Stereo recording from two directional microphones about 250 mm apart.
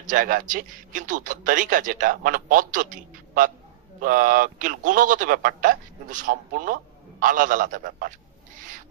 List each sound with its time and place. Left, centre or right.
0.0 s a man's voice: right